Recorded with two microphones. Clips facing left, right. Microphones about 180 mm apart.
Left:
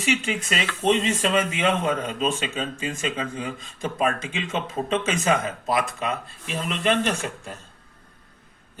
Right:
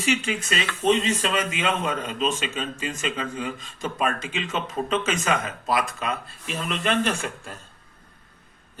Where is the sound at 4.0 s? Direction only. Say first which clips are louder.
Left 2 dB; 25° left (ahead or behind).